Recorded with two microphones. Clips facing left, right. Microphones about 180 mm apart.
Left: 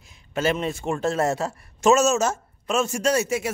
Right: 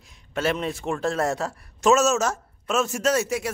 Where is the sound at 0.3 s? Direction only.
Centre (ahead or behind).